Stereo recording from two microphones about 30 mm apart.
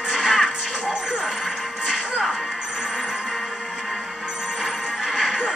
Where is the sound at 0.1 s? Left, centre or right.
Centre.